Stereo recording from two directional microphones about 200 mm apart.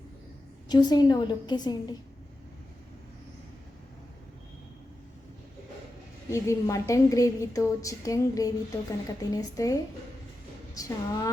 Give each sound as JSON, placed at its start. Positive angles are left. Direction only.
{"t": 0.7, "sound": "a woman's voice", "side_deg": 20}
{"t": 6.3, "sound": "a woman's voice", "side_deg": 15}
{"t": 10.8, "sound": "a woman's voice", "side_deg": 15}